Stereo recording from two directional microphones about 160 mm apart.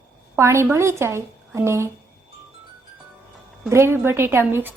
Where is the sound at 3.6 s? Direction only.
15° right (ahead or behind).